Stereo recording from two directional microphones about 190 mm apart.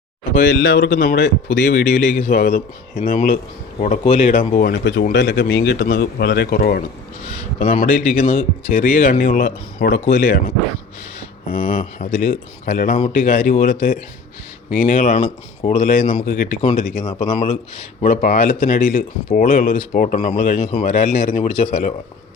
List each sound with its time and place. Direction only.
0.3 s speech: 60° left (ahead or behind)
16.6 s speech: 40° left (ahead or behind)